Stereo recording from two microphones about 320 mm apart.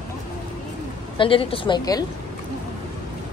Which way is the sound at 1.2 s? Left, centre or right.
Centre.